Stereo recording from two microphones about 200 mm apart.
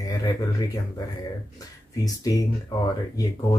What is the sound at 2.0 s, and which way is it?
Speech, 20° left (ahead or behind).